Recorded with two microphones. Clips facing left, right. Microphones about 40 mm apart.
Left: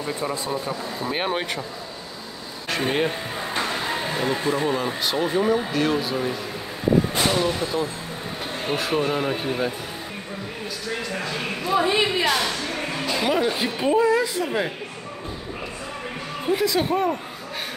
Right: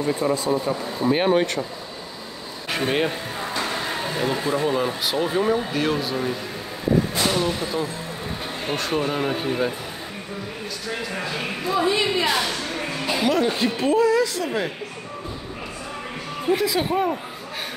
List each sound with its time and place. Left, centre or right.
0.0 s speech: centre
2.9 s speech: centre
4.0 s music: centre
4.5 s speech: centre
10.9 s a sound: centre
11.8 s a woman's voice: centre
12.2 s speech: centre
13.2 s a woman's voice: centre
16.6 s speech: centre